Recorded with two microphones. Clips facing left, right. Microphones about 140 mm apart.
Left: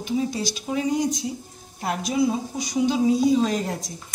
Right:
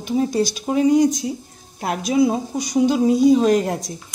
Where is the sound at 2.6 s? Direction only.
45° right (ahead or behind).